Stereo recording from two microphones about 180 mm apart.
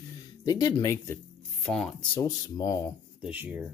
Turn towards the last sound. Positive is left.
turn(degrees=-10)  # may be behind; listen again after turning